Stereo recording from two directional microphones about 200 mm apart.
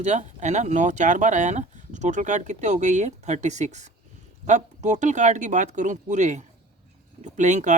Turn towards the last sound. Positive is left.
turn(degrees=-35)  # may be behind; listen again after turning